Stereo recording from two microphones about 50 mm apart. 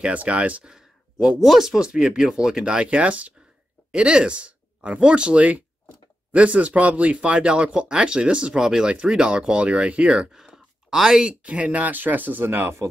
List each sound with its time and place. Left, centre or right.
0.0 s speech: right
0.7 s a sound: centre
1.4 s speech: centre
1.8 s speech: centre
11.4 s speech: right